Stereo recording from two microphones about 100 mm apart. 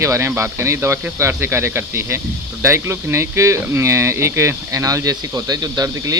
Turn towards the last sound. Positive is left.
turn(degrees=-40)  # may be behind; listen again after turning